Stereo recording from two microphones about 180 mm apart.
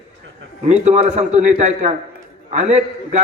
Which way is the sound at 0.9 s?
40° right (ahead or behind).